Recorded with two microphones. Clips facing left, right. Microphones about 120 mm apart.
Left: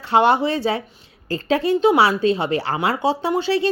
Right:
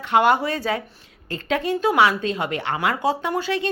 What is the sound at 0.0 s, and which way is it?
Speech, 30° left (ahead or behind).